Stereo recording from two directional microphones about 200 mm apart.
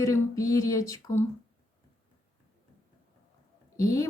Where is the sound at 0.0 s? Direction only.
15° left (ahead or behind).